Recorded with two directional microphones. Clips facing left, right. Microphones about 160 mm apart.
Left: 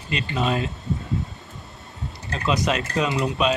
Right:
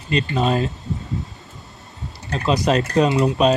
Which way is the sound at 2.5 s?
35° right (ahead or behind).